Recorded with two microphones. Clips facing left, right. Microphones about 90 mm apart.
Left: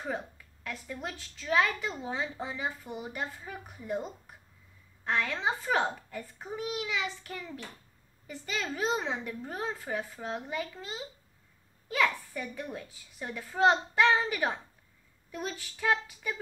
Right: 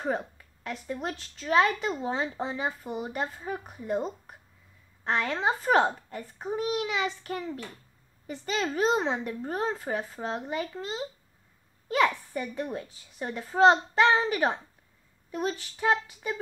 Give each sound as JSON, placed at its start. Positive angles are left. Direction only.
{"t": 0.0, "sound": "a woman's voice", "side_deg": -35}